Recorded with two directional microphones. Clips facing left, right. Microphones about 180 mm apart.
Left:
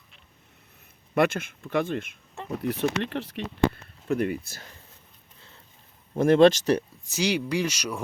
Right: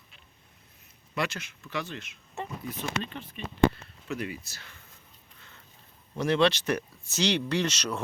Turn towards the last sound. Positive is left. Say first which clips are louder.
# left 1 dB
turn(degrees=10)  # may be behind; listen again after turning